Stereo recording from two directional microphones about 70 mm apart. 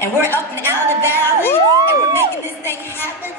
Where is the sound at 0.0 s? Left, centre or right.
Left.